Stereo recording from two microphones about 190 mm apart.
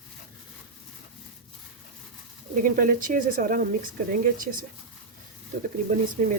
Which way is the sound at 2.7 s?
45° right (ahead or behind).